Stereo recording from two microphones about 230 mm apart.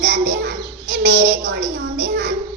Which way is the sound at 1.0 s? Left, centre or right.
Right.